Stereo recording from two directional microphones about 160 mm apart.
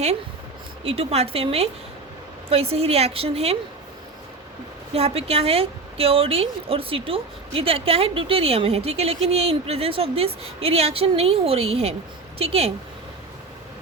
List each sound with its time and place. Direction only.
0.9 s a woman's voice: 40° right (ahead or behind)
4.9 s a woman's voice: 40° right (ahead or behind)